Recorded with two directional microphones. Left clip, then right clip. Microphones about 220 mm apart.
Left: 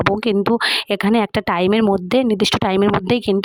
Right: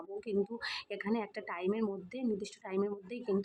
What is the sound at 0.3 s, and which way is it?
Speech, 45° left (ahead or behind).